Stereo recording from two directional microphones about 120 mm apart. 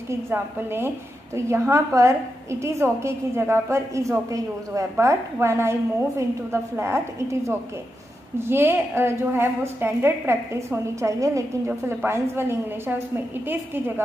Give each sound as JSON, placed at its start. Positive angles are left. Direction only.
{"t": 0.1, "sound": "a woman's voice", "side_deg": -20}